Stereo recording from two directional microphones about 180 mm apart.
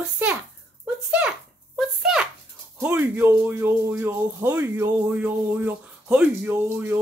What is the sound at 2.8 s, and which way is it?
Speech, 10° right (ahead or behind).